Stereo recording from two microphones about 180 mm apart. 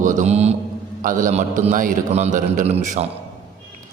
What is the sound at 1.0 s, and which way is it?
A man's voice, 45° right (ahead or behind).